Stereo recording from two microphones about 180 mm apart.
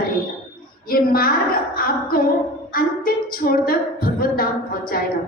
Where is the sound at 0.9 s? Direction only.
55° left (ahead or behind).